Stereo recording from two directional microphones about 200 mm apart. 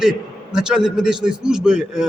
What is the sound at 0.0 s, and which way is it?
A man's voice, 5° right (ahead or behind).